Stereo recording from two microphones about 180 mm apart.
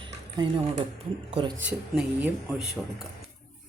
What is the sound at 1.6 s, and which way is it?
Speech, 5° right (ahead or behind).